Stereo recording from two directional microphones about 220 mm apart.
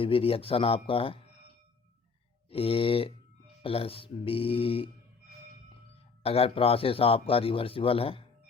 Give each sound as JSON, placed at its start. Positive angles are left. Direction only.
{"t": 0.0, "sound": "a man's voice", "side_deg": 25}
{"t": 2.5, "sound": "a man's voice", "side_deg": 25}
{"t": 6.2, "sound": "a man's voice", "side_deg": 25}